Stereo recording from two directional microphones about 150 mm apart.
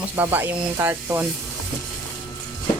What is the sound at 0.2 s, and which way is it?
Speech, 15° right (ahead or behind).